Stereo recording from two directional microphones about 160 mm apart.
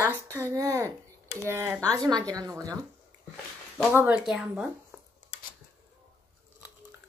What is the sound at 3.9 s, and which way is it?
Speech, 10° right (ahead or behind).